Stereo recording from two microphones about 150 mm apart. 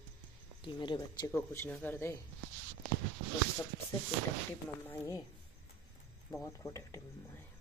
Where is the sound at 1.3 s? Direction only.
15° left (ahead or behind).